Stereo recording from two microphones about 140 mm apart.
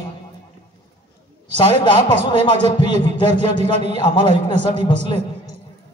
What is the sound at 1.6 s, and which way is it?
A man's voice, 35° left (ahead or behind).